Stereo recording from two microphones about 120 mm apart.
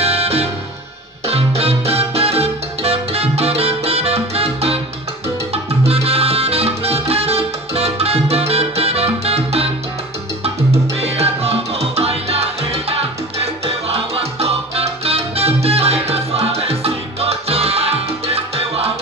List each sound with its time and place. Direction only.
0.0 s music: 60° right (ahead or behind)
5.5 s salsa music: 55° right (ahead or behind)
11.0 s music: 60° right (ahead or behind)